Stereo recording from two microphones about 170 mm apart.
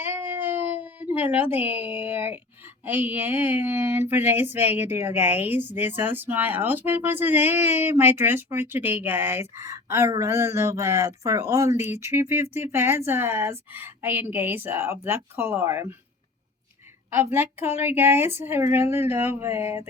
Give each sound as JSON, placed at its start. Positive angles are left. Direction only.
{"t": 0.0, "sound": "a sound", "side_deg": -10}
{"t": 2.8, "sound": "a woman's voice", "side_deg": -10}
{"t": 17.1, "sound": "a woman's voice", "side_deg": -15}